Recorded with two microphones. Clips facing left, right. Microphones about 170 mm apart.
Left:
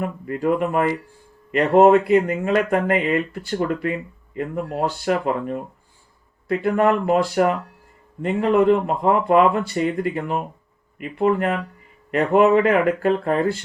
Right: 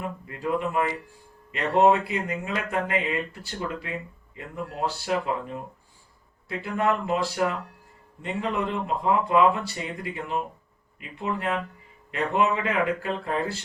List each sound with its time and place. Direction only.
0.0 s speech: 55° left (ahead or behind)